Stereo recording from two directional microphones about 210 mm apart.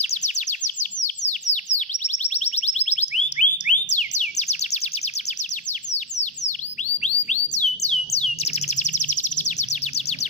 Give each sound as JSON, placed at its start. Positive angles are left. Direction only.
{"t": 0.0, "sound": "bird", "side_deg": 30}
{"t": 2.0, "sound": "music", "side_deg": 30}
{"t": 7.2, "sound": "bird", "side_deg": 35}